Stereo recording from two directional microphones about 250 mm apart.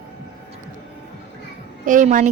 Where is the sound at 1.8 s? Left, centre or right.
Right.